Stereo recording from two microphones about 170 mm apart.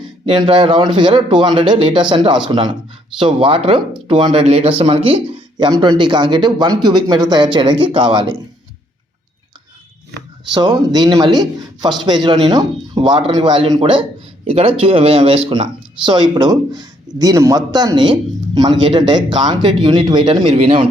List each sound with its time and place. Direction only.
0.0 s speech: 30° right (ahead or behind)
10.5 s speech: 25° right (ahead or behind)